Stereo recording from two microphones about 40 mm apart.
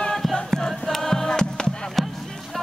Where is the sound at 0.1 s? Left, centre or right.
Centre; by 1.7 s left.